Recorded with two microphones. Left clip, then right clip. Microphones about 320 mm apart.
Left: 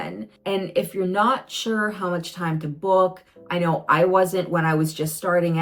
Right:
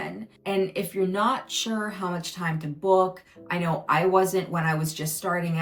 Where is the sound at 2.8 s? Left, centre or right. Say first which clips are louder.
Left 3 dB; right.